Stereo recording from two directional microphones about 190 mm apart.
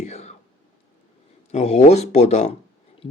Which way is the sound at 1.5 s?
35° left (ahead or behind).